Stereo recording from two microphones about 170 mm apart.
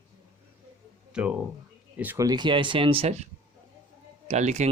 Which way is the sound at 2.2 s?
25° right (ahead or behind).